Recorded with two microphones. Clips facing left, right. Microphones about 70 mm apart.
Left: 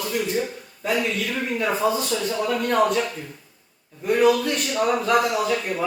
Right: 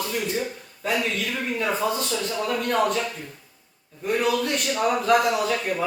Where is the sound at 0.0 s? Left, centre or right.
Centre.